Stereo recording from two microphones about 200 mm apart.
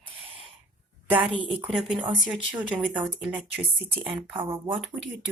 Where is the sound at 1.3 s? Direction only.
25° right (ahead or behind).